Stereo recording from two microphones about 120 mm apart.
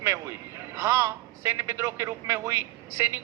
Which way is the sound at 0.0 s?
25° right (ahead or behind).